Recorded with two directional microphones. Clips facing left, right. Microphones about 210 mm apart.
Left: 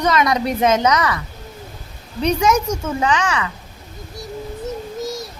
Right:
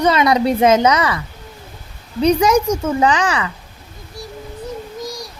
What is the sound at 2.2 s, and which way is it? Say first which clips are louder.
Speech: right 4 dB; 35° right (ahead or behind).